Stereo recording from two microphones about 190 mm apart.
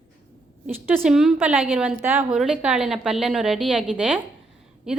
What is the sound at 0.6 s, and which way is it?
A woman's voice, 5° right (ahead or behind).